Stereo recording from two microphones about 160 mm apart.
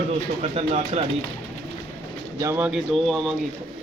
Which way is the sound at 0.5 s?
40° right (ahead or behind).